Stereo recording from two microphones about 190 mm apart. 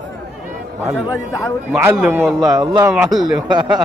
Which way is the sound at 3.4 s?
25° right (ahead or behind).